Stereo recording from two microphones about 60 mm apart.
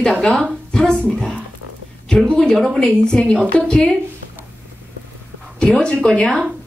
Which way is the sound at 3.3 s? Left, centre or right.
Centre.